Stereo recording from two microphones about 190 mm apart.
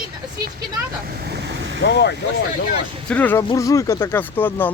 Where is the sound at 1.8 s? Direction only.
65° left (ahead or behind).